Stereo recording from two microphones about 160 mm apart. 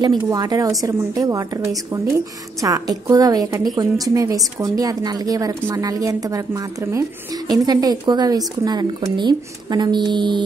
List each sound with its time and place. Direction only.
0.3 s a woman's voice: 25° right (ahead or behind)